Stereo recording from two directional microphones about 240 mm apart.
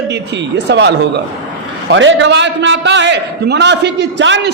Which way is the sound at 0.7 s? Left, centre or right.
Right.